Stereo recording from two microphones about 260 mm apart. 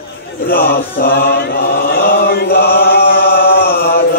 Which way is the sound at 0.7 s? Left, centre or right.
Left.